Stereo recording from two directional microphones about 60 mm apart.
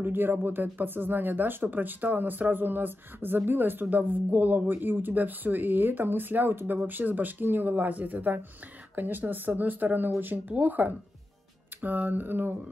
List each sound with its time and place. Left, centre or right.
0.0 s speech: right